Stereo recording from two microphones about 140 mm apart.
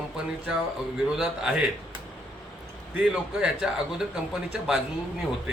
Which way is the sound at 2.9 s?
5° right (ahead or behind).